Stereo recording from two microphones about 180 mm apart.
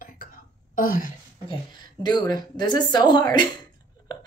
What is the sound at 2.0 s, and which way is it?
A woman's voice, 25° left (ahead or behind).